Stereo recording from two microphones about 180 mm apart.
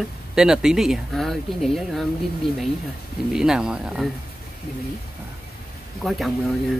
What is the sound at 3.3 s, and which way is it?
Speech, 5° right (ahead or behind).